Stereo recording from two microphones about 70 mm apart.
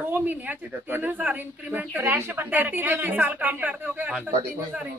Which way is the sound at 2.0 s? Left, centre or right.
Right.